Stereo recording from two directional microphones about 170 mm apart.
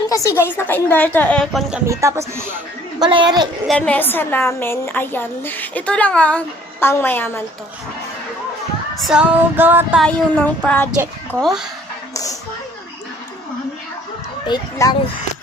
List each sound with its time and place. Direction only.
0.1 s a woman's voice: 20° left (ahead or behind)
1.9 s female singing: 15° right (ahead or behind)
3.0 s speech: 25° right (ahead or behind)
3.7 s a woman's voice: 5° left (ahead or behind)
9.0 s female singing: 5° right (ahead or behind)
10.0 s a woman's voice: 5° left (ahead or behind)
12.1 s a sound: 20° left (ahead or behind)
14.4 s speech: 25° left (ahead or behind)